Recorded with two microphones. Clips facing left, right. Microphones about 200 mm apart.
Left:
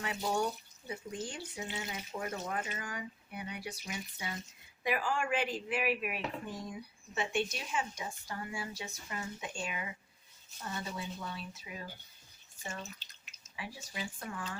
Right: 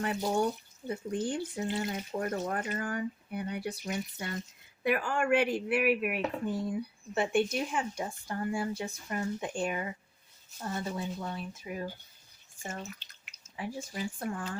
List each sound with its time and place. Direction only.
0.0 s speech: 55° right (ahead or behind)
13.6 s speech: 50° right (ahead or behind)